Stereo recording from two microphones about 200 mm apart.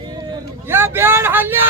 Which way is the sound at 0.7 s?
10° right (ahead or behind).